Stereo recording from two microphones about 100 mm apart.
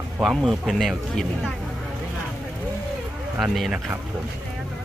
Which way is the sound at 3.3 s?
10° right (ahead or behind).